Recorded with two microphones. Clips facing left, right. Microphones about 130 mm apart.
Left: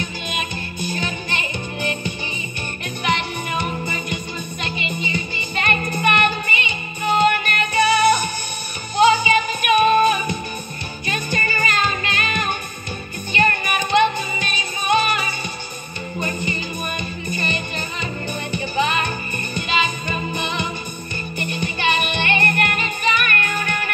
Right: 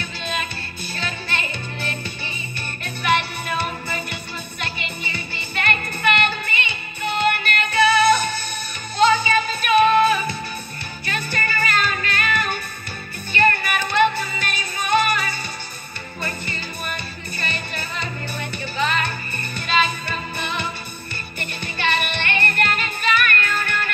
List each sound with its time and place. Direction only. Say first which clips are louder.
0.0 s music: left 1 dB; 15° left (ahead or behind)